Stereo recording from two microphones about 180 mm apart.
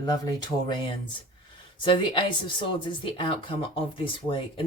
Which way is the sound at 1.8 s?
25° left (ahead or behind).